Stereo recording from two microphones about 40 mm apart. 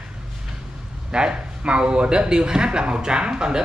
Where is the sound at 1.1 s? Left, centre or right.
Right.